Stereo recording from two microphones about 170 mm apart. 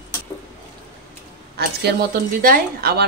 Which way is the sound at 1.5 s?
60° right (ahead or behind).